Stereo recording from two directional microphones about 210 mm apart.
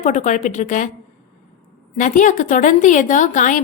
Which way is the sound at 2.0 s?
35° left (ahead or behind).